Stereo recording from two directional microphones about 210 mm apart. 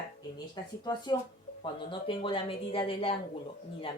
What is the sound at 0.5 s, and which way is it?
Speech, 20° left (ahead or behind).